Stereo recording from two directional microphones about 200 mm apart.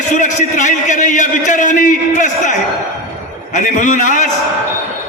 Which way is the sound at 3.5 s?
40° left (ahead or behind).